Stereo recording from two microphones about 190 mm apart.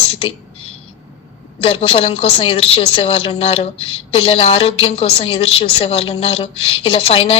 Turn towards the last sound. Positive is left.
turn(degrees=30)  # may be behind; listen again after turning